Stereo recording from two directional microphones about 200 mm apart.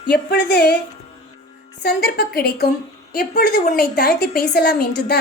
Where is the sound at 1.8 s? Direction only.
50° left (ahead or behind).